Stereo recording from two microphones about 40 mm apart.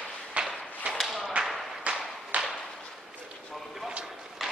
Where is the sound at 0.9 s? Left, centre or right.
Centre.